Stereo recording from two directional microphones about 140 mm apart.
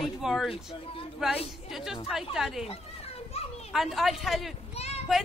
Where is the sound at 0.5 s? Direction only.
40° left (ahead or behind).